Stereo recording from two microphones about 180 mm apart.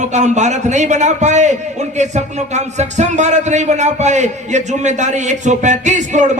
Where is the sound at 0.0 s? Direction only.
40° right (ahead or behind).